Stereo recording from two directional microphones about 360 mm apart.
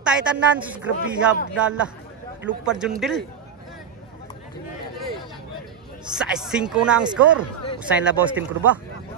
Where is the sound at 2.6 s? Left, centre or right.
Centre.